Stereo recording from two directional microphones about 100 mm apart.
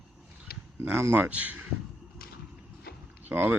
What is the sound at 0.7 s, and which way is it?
Speech, 25° right (ahead or behind).